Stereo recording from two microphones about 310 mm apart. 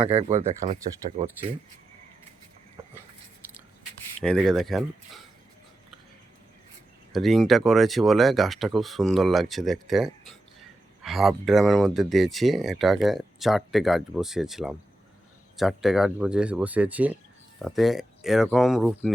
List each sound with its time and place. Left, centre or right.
0.2 s speech: centre
0.4 s speech: right
4.2 s speech: centre
7.1 s speech: centre